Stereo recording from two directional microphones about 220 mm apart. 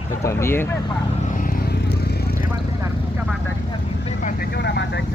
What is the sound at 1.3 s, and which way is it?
Vehicle, 40° left (ahead or behind).